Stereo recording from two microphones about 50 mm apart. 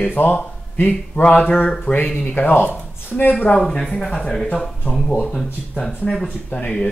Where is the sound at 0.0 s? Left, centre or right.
Left.